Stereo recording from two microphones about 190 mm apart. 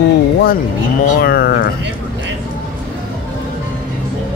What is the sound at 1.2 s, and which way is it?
Speech, 55° left (ahead or behind).